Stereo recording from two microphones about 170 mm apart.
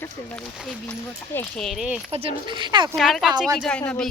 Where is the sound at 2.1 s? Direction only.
30° right (ahead or behind).